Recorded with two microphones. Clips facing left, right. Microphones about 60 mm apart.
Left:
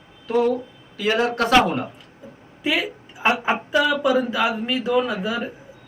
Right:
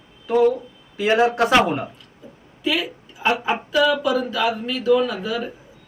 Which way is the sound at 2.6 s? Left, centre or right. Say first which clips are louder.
Even; left.